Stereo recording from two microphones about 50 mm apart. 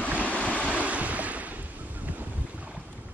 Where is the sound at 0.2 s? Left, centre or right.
Left.